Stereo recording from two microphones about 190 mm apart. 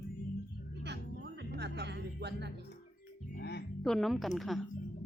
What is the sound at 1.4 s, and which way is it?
Music, 60° right (ahead or behind).